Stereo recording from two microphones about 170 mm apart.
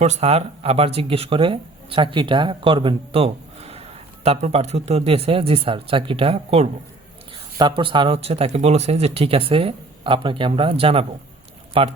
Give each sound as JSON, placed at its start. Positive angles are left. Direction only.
{"t": 0.0, "sound": "speech", "side_deg": -40}
{"t": 7.8, "sound": "speech", "side_deg": -30}